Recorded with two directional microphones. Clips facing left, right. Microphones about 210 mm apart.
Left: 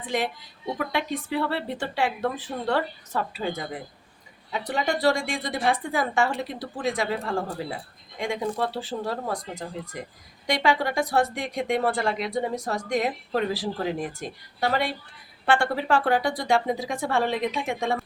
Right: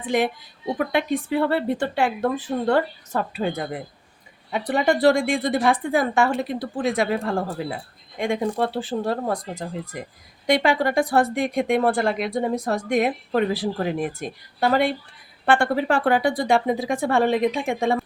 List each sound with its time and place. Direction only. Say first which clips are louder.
0.9 s a woman's voice: right 6 dB; 55° right (ahead or behind)